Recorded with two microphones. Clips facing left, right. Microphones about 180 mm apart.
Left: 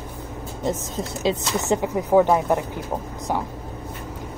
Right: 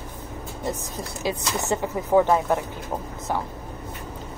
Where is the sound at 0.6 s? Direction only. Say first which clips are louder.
Left 5 dB; 20° left (ahead or behind).